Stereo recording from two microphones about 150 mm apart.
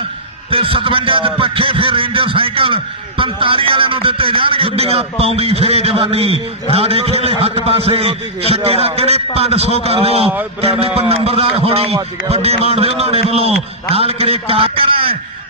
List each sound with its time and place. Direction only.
0.5 s a man's voice: 35° right (ahead or behind)